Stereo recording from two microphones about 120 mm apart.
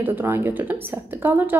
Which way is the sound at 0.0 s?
20° right (ahead or behind).